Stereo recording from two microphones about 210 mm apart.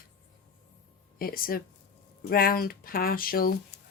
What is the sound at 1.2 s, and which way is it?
Speech, 45° left (ahead or behind).